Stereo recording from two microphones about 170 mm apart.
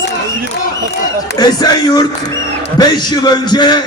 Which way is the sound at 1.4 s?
25° left (ahead or behind).